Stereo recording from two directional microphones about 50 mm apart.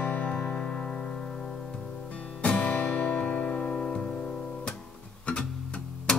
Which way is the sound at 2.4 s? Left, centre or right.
Left.